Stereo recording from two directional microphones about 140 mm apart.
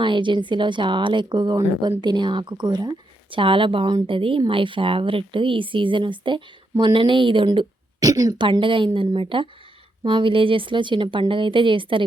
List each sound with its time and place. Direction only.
0.0 s a woman's voice: 35° right (ahead or behind)